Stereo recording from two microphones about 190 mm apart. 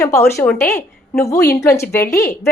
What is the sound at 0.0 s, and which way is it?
A woman's voice, 15° left (ahead or behind).